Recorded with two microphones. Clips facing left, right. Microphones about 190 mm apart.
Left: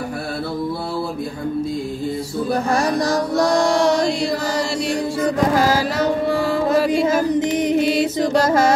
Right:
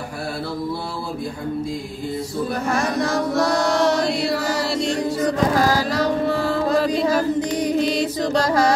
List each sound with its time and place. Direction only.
2.7 s music: 35° left (ahead or behind)
6.9 s music: 20° left (ahead or behind)
7.8 s music: 5° left (ahead or behind)
8.2 s music: 25° left (ahead or behind)